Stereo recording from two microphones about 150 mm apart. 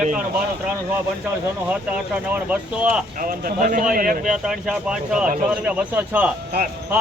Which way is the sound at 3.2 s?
70° right (ahead or behind).